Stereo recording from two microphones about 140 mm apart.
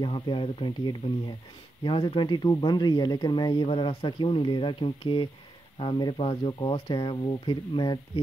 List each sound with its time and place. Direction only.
0.0 s speech: 35° left (ahead or behind)